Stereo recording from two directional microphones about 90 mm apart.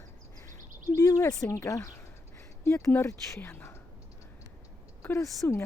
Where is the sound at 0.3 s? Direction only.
35° left (ahead or behind).